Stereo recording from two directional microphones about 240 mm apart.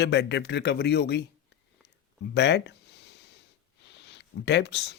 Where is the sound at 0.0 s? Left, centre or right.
Left.